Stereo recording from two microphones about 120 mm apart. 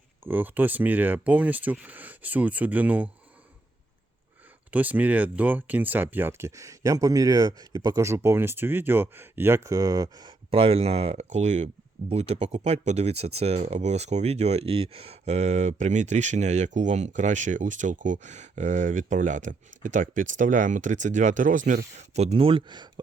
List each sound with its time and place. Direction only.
0.3 s speech: 15° right (ahead or behind)
4.7 s speech: 15° right (ahead or behind); by 10.3 s 35° right (ahead or behind)
10.5 s speech: 55° right (ahead or behind)